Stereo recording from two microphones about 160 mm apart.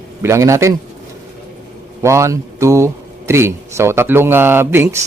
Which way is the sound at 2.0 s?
20° right (ahead or behind).